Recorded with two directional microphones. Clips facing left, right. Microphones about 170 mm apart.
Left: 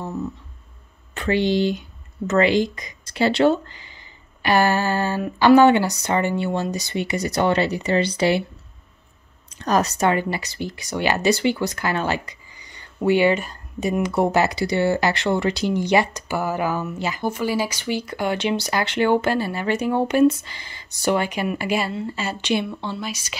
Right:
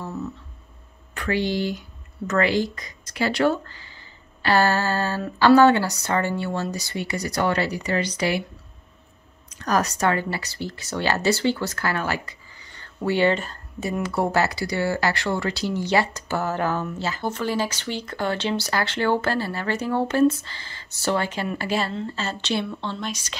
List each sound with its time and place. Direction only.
0.0 s music: 15° left (ahead or behind)
1.1 s speech: 25° left (ahead or behind)
9.5 s speech: 25° left (ahead or behind); by 23.3 s 10° left (ahead or behind)